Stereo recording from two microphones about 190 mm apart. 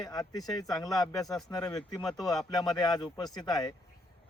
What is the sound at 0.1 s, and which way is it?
Speech, 20° left (ahead or behind).